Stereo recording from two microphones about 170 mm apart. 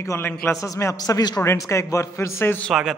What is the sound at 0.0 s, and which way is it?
A man's voice, 15° left (ahead or behind).